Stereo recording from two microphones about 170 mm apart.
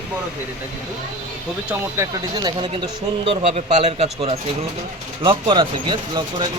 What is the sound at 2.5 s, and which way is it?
A man's voice, 30° right (ahead or behind).